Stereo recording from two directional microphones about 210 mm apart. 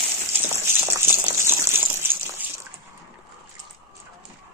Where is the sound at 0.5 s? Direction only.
10° right (ahead or behind).